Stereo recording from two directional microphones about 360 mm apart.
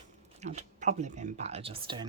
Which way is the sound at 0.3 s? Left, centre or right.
Centre.